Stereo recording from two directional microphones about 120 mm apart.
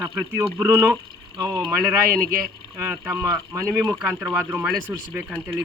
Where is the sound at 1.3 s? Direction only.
35° right (ahead or behind).